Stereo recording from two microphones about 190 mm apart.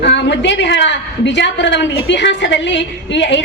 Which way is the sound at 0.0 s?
65° left (ahead or behind).